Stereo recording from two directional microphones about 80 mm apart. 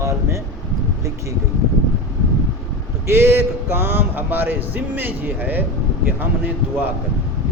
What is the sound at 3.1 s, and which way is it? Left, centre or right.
A man's voice, right.